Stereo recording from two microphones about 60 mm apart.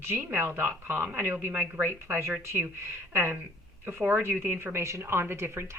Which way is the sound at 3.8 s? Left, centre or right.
Right.